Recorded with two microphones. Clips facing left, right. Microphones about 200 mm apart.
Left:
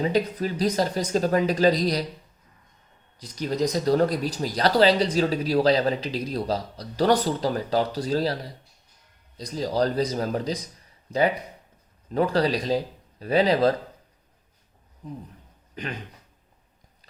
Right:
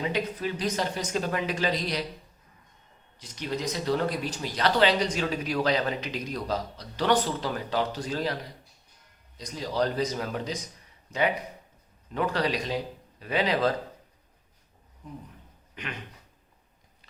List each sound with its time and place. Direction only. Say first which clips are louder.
0.0 s speech: left 5 dB; 40° left (ahead or behind)
3.2 s speech: left 7 dB; 35° left (ahead or behind)
12.1 s speech: left 5 dB; 35° left (ahead or behind)
15.0 s speech: left 5 dB; 35° left (ahead or behind)
15.7 s a sound: left 5 dB; 35° left (ahead or behind)